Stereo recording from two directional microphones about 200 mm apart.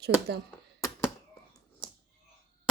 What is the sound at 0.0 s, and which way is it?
Speech, 55° right (ahead or behind).